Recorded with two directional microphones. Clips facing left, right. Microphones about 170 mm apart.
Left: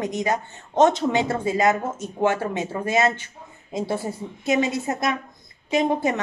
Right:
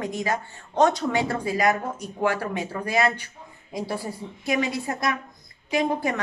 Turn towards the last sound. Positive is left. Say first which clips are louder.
# left 3 dB
turn(degrees=20)  # may be behind; listen again after turning